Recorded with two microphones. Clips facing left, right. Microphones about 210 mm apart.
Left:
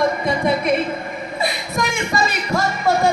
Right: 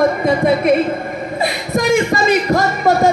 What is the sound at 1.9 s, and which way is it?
Speech, 40° right (ahead or behind).